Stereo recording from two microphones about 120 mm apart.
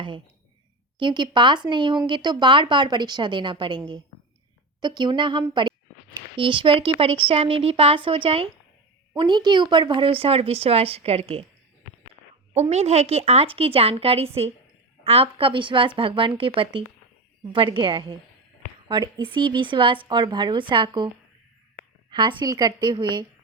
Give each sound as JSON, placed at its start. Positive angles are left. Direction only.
{"t": 0.9, "sound": "speech", "side_deg": -40}
{"t": 4.8, "sound": "a woman's voice", "side_deg": -40}
{"t": 9.1, "sound": "a woman's voice", "side_deg": -40}
{"t": 12.5, "sound": "a woman's voice", "side_deg": -65}
{"t": 22.1, "sound": "speech", "side_deg": -40}